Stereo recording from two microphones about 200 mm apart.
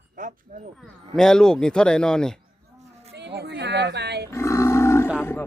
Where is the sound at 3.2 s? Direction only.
55° right (ahead or behind).